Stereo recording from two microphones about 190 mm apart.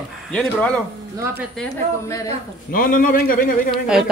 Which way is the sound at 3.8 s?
5° right (ahead or behind).